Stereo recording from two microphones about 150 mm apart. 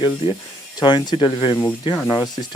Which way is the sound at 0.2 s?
35° left (ahead or behind).